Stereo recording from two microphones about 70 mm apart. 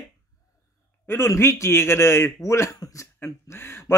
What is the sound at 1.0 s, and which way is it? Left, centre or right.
Speech, left.